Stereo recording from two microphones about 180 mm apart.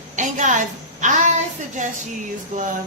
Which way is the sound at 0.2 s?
45° right (ahead or behind).